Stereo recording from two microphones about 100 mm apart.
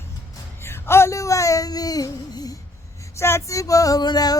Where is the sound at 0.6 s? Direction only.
25° left (ahead or behind).